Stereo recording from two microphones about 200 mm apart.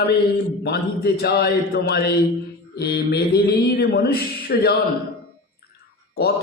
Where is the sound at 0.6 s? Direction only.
55° left (ahead or behind).